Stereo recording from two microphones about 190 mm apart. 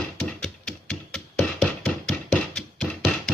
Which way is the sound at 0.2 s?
5° left (ahead or behind).